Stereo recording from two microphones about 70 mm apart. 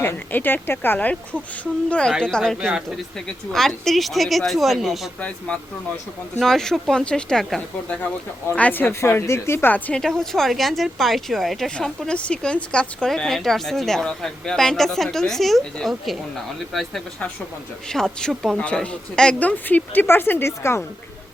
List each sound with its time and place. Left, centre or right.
0.0 s speech: left; by 2.1 s centre
3.5 s speech: centre
6.4 s speech: centre
8.5 s speech: left
8.9 s speech: left
9.9 s speech: centre
12.0 s speech: centre
17.8 s speech: centre; by 20.8 s left